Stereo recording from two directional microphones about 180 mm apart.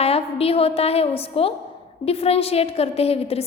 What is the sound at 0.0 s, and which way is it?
A woman's voice, 35° left (ahead or behind).